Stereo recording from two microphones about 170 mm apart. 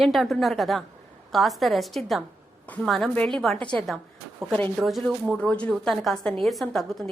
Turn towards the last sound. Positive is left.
turn(degrees=0)  # may be behind; listen again after turning